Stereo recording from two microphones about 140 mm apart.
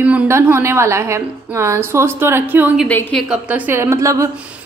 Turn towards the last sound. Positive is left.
turn(degrees=-20)  # may be behind; listen again after turning